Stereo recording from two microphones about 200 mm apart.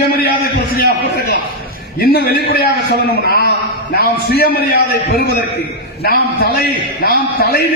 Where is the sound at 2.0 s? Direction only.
50° left (ahead or behind).